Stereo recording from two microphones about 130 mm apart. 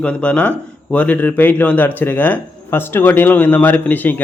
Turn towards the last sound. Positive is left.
turn(degrees=15)  # may be behind; listen again after turning